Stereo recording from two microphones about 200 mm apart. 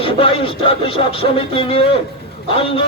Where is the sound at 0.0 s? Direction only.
25° left (ahead or behind).